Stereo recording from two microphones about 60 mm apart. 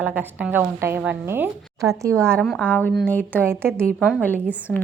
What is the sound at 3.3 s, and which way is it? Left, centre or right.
Speech, right.